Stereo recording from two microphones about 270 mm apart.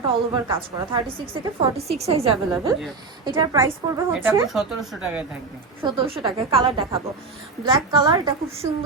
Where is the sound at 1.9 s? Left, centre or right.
Right; by 5.2 s centre.